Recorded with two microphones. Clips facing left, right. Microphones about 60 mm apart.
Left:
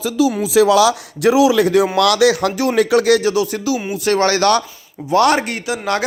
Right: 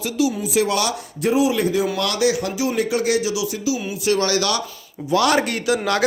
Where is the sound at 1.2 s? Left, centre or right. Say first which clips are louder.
Left 6 dB; left.